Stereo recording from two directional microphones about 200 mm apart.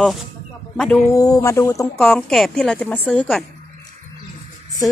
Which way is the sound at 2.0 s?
5° left (ahead or behind).